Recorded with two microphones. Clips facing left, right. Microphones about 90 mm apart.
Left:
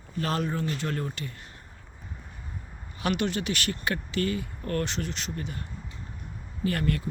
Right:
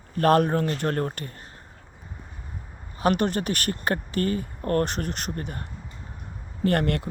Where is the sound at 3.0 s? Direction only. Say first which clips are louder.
Right 5 dB; 45° right (ahead or behind).